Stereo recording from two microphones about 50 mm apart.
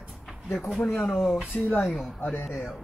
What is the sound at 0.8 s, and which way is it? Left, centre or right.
Speech, left.